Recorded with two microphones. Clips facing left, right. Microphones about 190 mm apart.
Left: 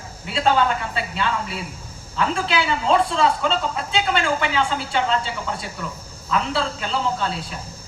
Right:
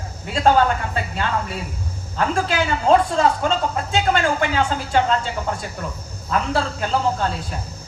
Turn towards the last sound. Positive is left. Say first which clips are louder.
# right 3 dB
turn(degrees=-45)  # may be behind; listen again after turning